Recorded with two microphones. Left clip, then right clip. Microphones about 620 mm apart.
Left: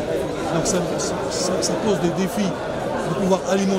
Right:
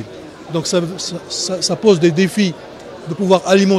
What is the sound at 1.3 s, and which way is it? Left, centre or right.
A man's voice, right.